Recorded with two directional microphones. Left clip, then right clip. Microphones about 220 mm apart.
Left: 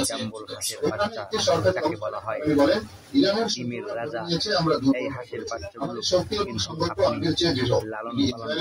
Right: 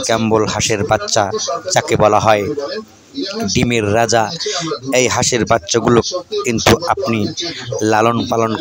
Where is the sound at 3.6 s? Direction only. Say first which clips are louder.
Right 17 dB; 50° right (ahead or behind).